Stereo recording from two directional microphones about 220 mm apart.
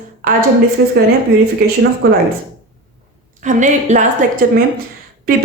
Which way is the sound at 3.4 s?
35° right (ahead or behind).